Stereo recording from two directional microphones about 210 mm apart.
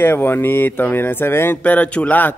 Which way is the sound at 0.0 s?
10° left (ahead or behind).